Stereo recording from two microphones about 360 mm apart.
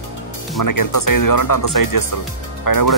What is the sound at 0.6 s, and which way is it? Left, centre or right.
Speech, left.